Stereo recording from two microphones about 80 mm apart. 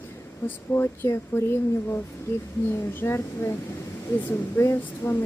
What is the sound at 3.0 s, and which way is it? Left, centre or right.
Speech, left.